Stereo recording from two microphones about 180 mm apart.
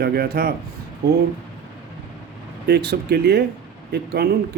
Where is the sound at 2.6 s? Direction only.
65° right (ahead or behind).